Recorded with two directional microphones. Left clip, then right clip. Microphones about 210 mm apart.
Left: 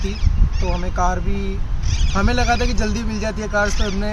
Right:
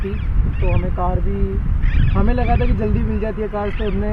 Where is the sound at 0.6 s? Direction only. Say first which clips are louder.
Left 2 dB; 45° left (ahead or behind).